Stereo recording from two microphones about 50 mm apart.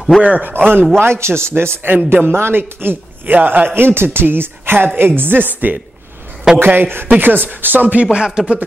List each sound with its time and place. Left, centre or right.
0.2 s a man's voice: right
0.5 s a man's voice: right
0.9 s a man's voice: right; by 8.5 s centre